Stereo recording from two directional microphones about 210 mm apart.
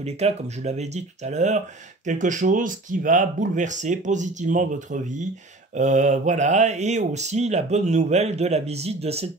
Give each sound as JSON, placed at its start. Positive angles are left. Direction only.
{"t": 0.0, "sound": "speech", "side_deg": -30}